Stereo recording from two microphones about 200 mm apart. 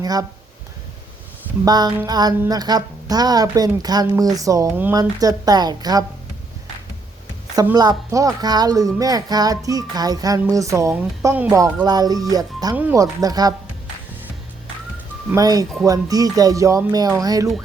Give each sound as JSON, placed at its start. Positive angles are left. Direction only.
{"t": 0.0, "sound": "speech", "side_deg": -20}
{"t": 1.6, "sound": "speech", "side_deg": -20}
{"t": 7.5, "sound": "speech", "side_deg": -15}
{"t": 15.3, "sound": "speech", "side_deg": -20}